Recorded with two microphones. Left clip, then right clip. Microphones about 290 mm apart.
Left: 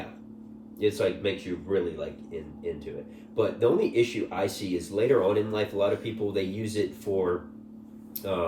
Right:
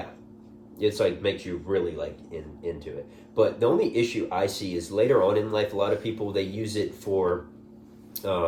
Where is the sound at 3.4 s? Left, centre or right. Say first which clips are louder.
Right 2 dB; centre.